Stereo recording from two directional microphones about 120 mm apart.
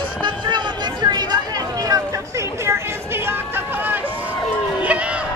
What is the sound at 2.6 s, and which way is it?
Chatter, 20° right (ahead or behind).